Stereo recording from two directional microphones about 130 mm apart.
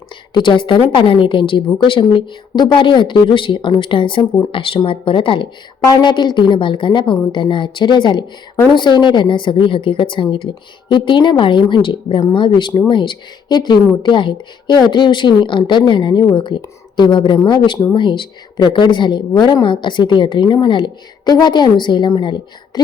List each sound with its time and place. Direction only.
0.3 s a woman's voice: 40° left (ahead or behind)